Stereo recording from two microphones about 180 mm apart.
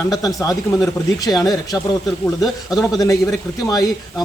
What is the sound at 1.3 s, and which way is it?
Speech, 20° left (ahead or behind).